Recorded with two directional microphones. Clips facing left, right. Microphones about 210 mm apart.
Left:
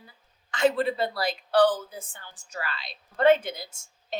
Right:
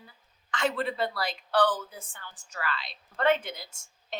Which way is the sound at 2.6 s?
35° left (ahead or behind).